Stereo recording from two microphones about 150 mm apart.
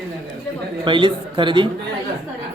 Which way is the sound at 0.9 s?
30° right (ahead or behind).